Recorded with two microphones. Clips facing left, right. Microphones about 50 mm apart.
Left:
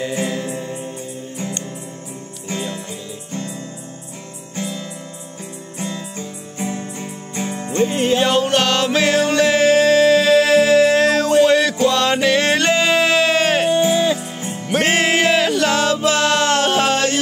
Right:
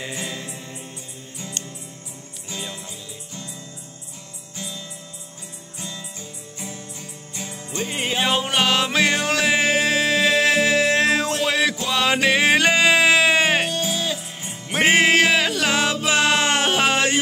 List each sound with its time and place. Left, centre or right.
0.1 s music: left
2.4 s music: left
4.6 s music: left
7.9 s music: centre
13.7 s music: left
14.7 s music: centre